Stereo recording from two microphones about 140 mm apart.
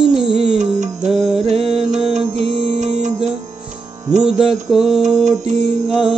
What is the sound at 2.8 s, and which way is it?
Music, 55° right (ahead or behind).